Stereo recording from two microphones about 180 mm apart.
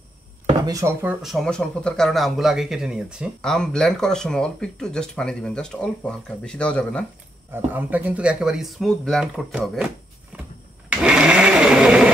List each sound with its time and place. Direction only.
0.7 s speech: 15° right (ahead or behind)
1.2 s a man's voice: centre (ahead or behind)
7.5 s a man's voice: 10° right (ahead or behind)
10.3 s a sound: 10° right (ahead or behind)
10.9 s blender: 5° right (ahead or behind)